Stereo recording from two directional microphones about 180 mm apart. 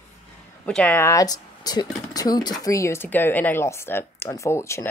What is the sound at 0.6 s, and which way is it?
A woman's voice, 5° left (ahead or behind).